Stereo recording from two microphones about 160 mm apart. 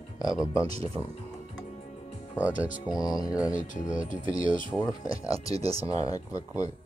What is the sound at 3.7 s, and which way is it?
Speech, 55° left (ahead or behind).